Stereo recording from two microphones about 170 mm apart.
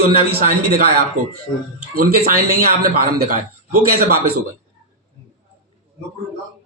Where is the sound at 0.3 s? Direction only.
70° right (ahead or behind).